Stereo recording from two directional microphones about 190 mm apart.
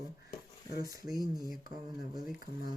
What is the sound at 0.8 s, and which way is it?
Speech, 20° right (ahead or behind).